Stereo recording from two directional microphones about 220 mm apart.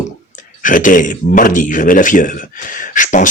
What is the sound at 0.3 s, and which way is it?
Speech, 35° left (ahead or behind).